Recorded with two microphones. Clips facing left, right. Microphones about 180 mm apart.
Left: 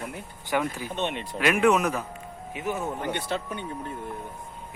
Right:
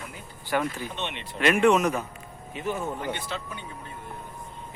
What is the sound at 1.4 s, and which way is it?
Speech, 5° left (ahead or behind).